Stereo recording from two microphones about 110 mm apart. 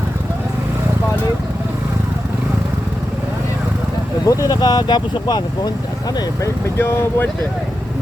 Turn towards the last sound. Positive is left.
turn(degrees=20)  # may be behind; listen again after turning